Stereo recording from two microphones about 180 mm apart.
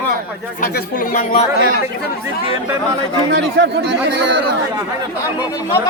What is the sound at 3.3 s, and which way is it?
Speech, 75° right (ahead or behind).